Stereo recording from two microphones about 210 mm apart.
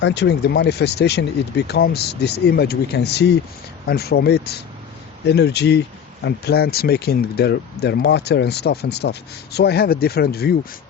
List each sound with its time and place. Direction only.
0.0 s speech: 55° left (ahead or behind)